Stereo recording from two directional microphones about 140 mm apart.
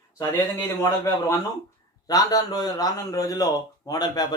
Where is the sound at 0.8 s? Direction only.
25° left (ahead or behind).